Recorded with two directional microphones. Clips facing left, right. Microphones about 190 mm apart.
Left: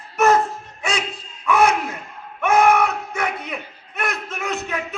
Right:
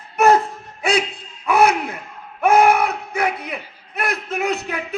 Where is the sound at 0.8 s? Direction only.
35° right (ahead or behind).